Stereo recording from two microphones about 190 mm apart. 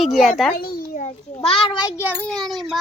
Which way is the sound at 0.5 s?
50° left (ahead or behind).